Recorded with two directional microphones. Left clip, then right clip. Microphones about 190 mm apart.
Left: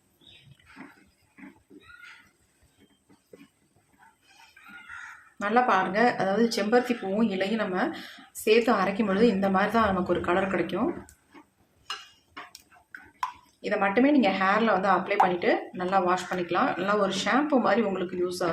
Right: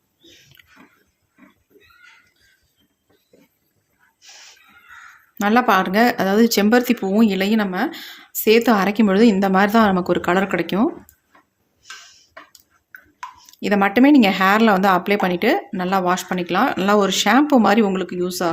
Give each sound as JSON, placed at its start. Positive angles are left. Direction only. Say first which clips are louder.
{"t": 5.4, "sound": "speech", "louder": "right 7 dB", "side_deg": -60}
{"t": 13.6, "sound": "speech", "louder": "right 8 dB", "side_deg": -65}